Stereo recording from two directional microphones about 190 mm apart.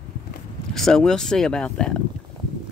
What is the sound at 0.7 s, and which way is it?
Speech, 5° left (ahead or behind).